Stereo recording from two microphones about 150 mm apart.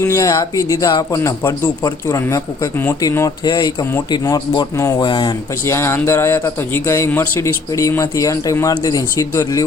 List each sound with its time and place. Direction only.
0.0 s a man's voice: 20° left (ahead or behind)
5.0 s speech: 30° left (ahead or behind)
5.6 s a man's voice: 20° left (ahead or behind)